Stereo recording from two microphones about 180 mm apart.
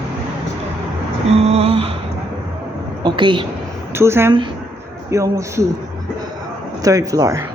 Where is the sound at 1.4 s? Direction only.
35° right (ahead or behind).